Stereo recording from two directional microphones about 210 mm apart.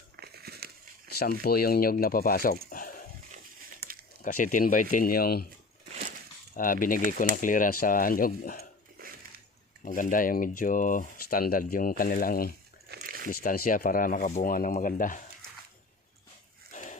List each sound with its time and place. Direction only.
0.2 s crumpling: 50° right (ahead or behind)
1.2 s speech: 45° left (ahead or behind)
2.6 s a sound: 40° left (ahead or behind)
3.3 s a sound: 45° right (ahead or behind)
4.2 s speech: 40° left (ahead or behind)
6.6 s speech: 40° left (ahead or behind)
9.8 s speech: 40° left (ahead or behind)
12.9 s a sound: 45° right (ahead or behind)
13.2 s speech: 40° left (ahead or behind)
16.7 s dog: 35° left (ahead or behind)